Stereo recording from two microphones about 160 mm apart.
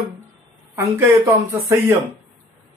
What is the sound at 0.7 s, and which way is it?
Speech, 15° right (ahead or behind).